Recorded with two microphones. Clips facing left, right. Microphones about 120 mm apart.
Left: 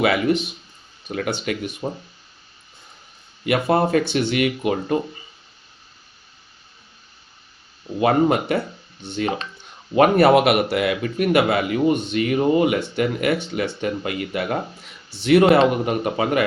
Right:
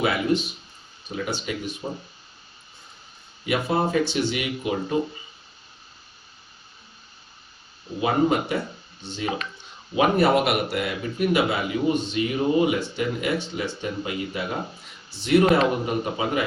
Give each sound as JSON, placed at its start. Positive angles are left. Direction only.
{"t": 1.1, "sound": "speech", "side_deg": 60}
{"t": 3.4, "sound": "speech", "side_deg": 60}
{"t": 8.0, "sound": "speech", "side_deg": 65}